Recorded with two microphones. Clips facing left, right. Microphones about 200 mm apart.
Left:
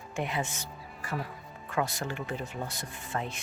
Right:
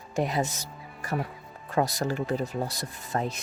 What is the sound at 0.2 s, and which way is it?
Speech, 40° right (ahead or behind).